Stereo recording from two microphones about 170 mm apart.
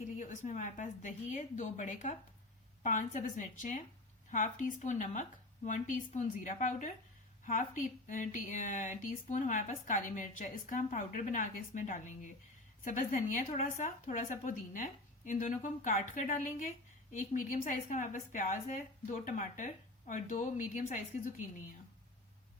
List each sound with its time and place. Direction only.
0.2 s speech: 50° left (ahead or behind)